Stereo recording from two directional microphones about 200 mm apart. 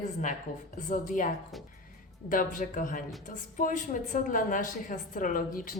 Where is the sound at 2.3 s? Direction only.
40° left (ahead or behind).